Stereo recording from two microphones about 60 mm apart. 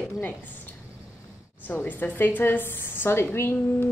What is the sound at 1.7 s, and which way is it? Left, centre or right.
A woman's voice, left.